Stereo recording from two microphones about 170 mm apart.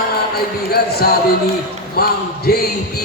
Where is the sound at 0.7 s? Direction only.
65° left (ahead or behind).